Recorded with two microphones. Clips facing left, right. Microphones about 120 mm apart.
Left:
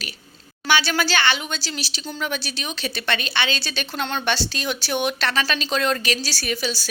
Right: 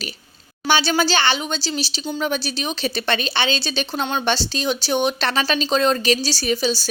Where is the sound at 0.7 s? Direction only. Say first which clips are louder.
Right 3 dB; 25° right (ahead or behind).